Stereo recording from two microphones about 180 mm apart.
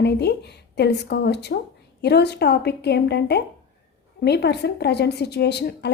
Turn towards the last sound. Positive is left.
turn(degrees=65)  # may be behind; listen again after turning